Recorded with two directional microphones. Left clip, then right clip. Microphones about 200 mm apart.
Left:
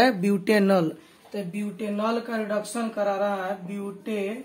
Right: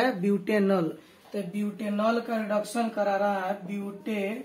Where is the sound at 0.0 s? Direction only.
60° left (ahead or behind).